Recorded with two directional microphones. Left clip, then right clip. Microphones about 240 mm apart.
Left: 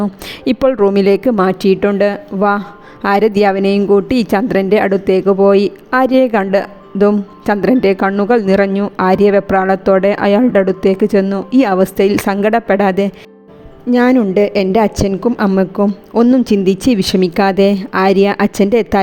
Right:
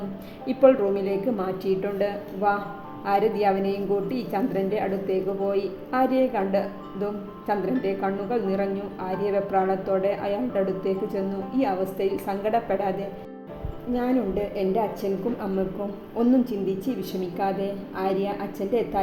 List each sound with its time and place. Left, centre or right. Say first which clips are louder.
0.4 s a woman's voice: left 7 dB; left
16.6 s a woman's voice: left 15 dB; left